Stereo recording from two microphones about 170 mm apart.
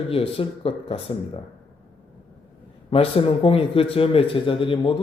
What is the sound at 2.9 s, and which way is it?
Speech, 35° left (ahead or behind).